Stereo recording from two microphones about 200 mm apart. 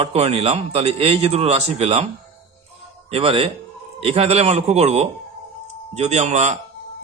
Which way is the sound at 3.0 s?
30° right (ahead or behind).